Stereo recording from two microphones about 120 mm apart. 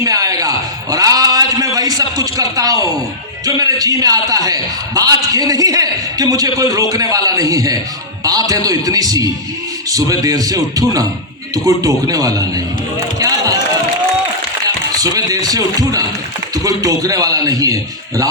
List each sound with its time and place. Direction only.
0.0 s a sound: 30° right (ahead or behind)
3.4 s a man's voice: 30° right (ahead or behind)
13.1 s music: 30° right (ahead or behind)
14.9 s a man's voice: 30° right (ahead or behind)